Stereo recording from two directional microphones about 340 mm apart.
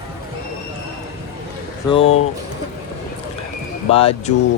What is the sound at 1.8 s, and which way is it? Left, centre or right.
Speech, centre.